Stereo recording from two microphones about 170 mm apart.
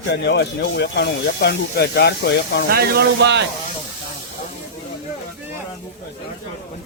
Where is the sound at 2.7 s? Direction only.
65° right (ahead or behind).